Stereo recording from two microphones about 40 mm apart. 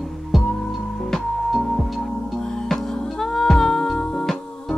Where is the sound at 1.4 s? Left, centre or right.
Centre.